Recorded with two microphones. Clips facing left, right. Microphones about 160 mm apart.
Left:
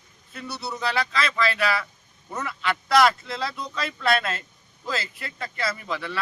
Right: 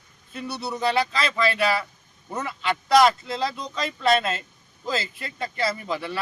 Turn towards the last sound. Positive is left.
turn(degrees=-30)  # may be behind; listen again after turning